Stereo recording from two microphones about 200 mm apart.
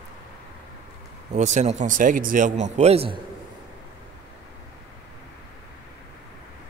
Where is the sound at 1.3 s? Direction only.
35° right (ahead or behind).